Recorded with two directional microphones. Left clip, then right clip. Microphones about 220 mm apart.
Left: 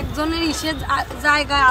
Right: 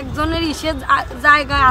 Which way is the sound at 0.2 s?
25° right (ahead or behind).